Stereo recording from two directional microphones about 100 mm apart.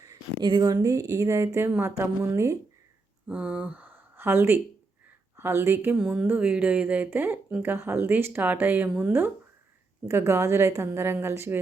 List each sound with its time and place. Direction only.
0.4 s a woman's voice: 45° right (ahead or behind); by 2.6 s 30° right (ahead or behind)
3.2 s speech: 15° right (ahead or behind)